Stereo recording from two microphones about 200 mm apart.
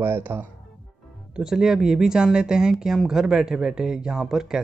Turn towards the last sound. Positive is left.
turn(degrees=-5)  # may be behind; listen again after turning